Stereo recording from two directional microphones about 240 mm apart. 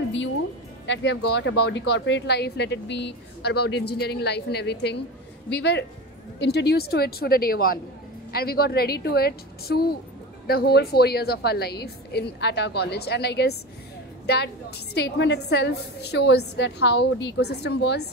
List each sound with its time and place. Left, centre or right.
0.8 s a woman's voice: left